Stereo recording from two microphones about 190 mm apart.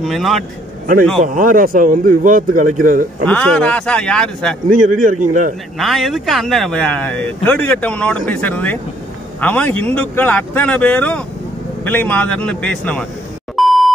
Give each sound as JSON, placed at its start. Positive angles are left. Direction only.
{"t": 0.0, "sound": "speech", "side_deg": 0}
{"t": 1.2, "sound": "speech", "side_deg": -45}
{"t": 3.3, "sound": "speech", "side_deg": 5}
{"t": 5.3, "sound": "speech", "side_deg": -40}
{"t": 5.8, "sound": "speech", "side_deg": 0}
{"t": 13.6, "sound": "a sound", "side_deg": 0}